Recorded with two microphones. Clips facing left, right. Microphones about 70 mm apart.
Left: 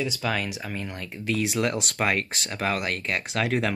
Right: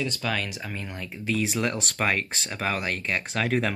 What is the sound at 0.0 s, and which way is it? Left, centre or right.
Speech, centre.